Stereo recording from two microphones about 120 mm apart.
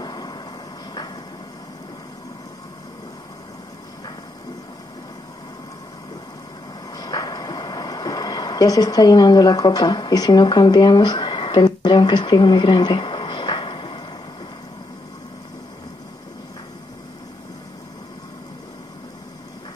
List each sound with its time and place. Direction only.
0.0 s vehicle: 35° left (ahead or behind)
6.9 s vehicle: 35° left (ahead or behind)